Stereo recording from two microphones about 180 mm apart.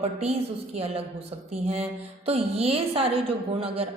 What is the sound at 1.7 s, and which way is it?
Speech, 35° right (ahead or behind).